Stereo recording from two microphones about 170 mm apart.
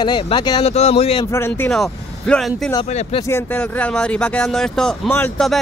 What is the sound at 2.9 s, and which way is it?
Speech, 40° left (ahead or behind).